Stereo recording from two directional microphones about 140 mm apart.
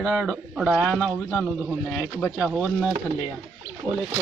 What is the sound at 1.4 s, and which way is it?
Speech, 5° right (ahead or behind).